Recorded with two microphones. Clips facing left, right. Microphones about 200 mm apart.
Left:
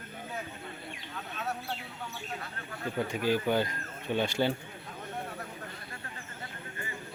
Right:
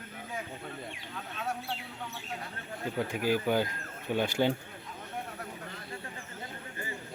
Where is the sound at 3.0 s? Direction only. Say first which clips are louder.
Even; 10° right (ahead or behind).